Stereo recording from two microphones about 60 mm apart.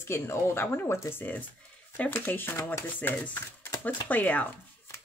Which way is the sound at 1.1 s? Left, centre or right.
Left.